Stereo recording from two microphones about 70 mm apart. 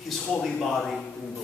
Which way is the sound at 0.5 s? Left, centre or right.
Centre.